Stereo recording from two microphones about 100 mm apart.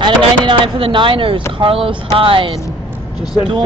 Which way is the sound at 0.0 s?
60° right (ahead or behind).